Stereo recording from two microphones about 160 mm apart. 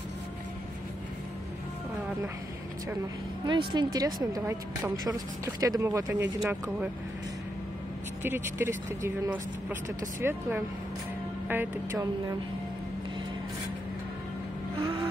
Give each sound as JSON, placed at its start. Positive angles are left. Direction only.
{"t": 3.4, "sound": "speech", "side_deg": -30}
{"t": 8.2, "sound": "speech", "side_deg": -15}
{"t": 11.4, "sound": "speech", "side_deg": -10}
{"t": 14.8, "sound": "vehicle", "side_deg": -30}